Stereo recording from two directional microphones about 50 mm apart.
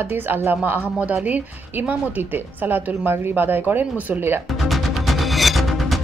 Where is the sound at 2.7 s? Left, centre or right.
Right.